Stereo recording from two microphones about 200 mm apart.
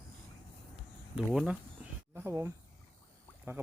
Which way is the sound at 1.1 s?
5° right (ahead or behind).